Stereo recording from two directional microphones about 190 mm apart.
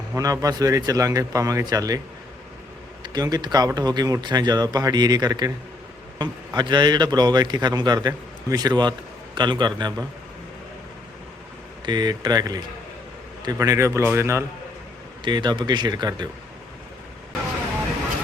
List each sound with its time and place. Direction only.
0.1 s speech: 15° right (ahead or behind)
3.0 s a man's voice: 20° right (ahead or behind)
11.9 s a man's voice: 20° right (ahead or behind)